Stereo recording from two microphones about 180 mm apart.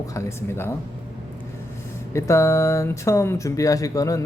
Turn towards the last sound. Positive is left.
turn(degrees=20)  # may be behind; listen again after turning